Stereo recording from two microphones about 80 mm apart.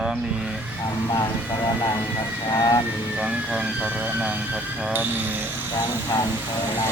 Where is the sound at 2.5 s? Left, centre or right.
Left.